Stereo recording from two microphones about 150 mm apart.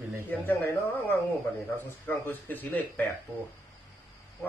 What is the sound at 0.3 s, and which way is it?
Speech, 15° left (ahead or behind).